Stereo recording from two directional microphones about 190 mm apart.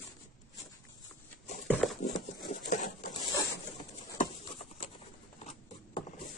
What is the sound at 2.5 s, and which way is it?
Patter, 45° left (ahead or behind).